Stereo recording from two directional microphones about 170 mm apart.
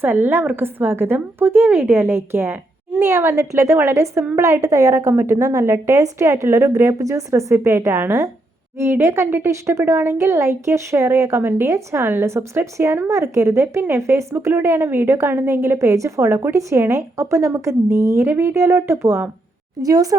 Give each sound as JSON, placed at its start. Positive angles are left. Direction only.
{"t": 0.0, "sound": "a woman's voice", "side_deg": -10}